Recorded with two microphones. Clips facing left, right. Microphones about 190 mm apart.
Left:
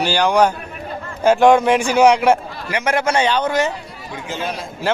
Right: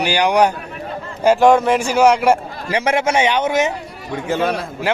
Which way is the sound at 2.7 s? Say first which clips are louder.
Right 2 dB; 30° right (ahead or behind).